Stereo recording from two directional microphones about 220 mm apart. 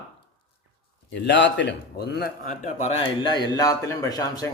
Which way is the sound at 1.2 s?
55° left (ahead or behind).